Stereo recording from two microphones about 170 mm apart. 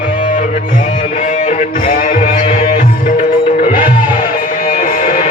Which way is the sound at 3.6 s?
50° left (ahead or behind).